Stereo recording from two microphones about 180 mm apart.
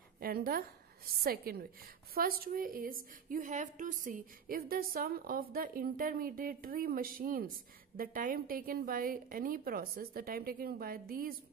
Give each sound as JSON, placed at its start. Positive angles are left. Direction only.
{"t": 0.2, "sound": "a woman's voice", "side_deg": -55}